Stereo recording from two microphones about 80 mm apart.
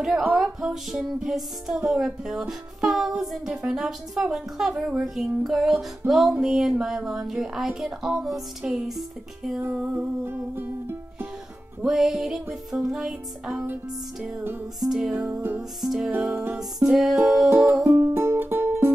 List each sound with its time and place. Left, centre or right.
0.2 s speech: centre
0.6 s speech: centre
9.6 s music: right
11.8 s speech: centre
14.8 s speech: centre
16.2 s music: centre
16.5 s speech: centre
17.9 s music: right